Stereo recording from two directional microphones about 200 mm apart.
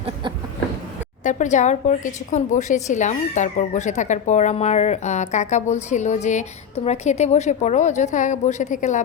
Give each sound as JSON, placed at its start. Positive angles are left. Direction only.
{"t": 1.2, "sound": "a woman's voice", "side_deg": 40}